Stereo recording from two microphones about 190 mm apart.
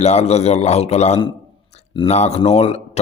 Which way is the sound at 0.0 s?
35° left (ahead or behind).